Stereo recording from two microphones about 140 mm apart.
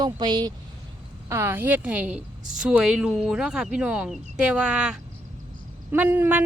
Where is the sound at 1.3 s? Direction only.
20° right (ahead or behind).